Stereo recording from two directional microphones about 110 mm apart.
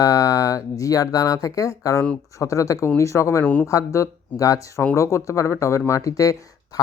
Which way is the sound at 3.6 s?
30° left (ahead or behind).